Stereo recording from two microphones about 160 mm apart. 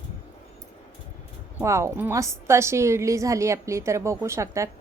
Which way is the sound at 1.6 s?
15° right (ahead or behind).